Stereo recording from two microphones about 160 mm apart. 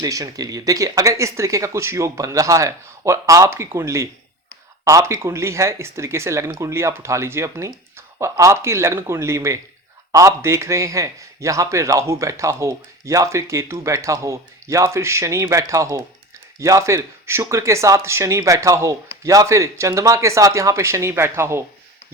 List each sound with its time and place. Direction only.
0.0 s a man's voice: 20° right (ahead or behind)